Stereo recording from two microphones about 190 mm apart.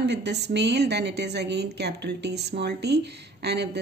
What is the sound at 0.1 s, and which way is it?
A woman's voice, 60° right (ahead or behind).